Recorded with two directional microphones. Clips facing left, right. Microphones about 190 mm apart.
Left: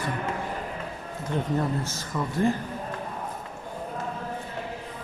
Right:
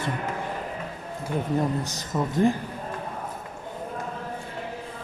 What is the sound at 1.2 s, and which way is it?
A man's voice, 10° right (ahead or behind).